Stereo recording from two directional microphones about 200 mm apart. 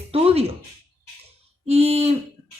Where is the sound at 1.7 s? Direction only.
30° right (ahead or behind).